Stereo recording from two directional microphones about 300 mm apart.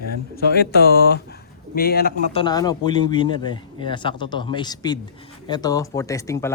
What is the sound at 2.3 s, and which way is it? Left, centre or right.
Speech, centre.